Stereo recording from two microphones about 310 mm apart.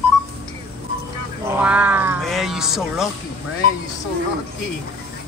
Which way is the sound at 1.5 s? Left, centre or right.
Centre.